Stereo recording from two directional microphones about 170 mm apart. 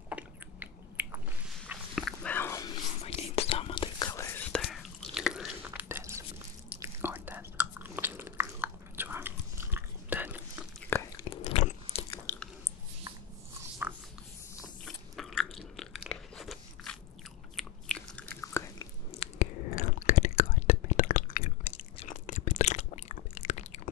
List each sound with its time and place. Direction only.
0.1 s chewing: 10° right (ahead or behind)
1.7 s dog: centre (ahead or behind)
2.3 s whispering: 15° left (ahead or behind)
3.0 s whispering: 35° left (ahead or behind); by 6.2 s 15° right (ahead or behind)
6.8 s chewing: 10° right (ahead or behind)
10.9 s a sound: 15° left (ahead or behind)
11.4 s biting: 40° left (ahead or behind)
13.8 s writing: 10° right (ahead or behind)
14.9 s chewing: centre (ahead or behind)
17.6 s biting: 5° left (ahead or behind)
18.4 s chewing: 15° left (ahead or behind)
19.1 s whispering: 45° left (ahead or behind)